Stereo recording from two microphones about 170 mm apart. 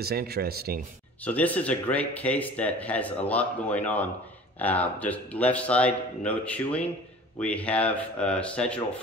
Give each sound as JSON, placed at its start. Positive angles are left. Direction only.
{"t": 0.0, "sound": "speech", "side_deg": -65}
{"t": 1.2, "sound": "a man's voice", "side_deg": 10}